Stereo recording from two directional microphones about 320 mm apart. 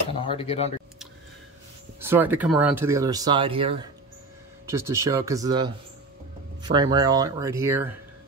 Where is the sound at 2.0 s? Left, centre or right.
Centre.